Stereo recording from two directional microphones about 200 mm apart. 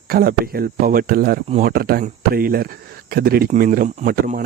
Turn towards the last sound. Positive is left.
turn(degrees=-45)  # may be behind; listen again after turning